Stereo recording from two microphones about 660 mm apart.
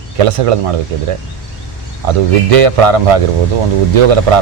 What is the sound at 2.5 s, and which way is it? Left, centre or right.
Speech, right.